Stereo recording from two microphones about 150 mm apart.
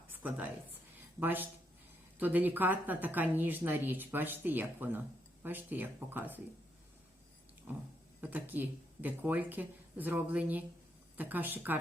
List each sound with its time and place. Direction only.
0.1 s a sound: 10° right (ahead or behind)
1.2 s speech: 10° right (ahead or behind)
7.7 s speech: 10° right (ahead or behind)